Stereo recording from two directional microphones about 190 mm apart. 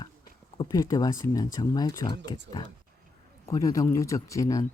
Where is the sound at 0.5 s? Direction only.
20° left (ahead or behind).